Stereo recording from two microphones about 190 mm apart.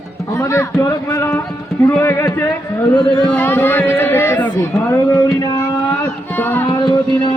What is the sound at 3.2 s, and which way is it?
Speech, 10° left (ahead or behind).